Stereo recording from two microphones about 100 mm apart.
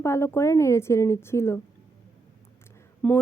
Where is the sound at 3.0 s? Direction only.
15° left (ahead or behind).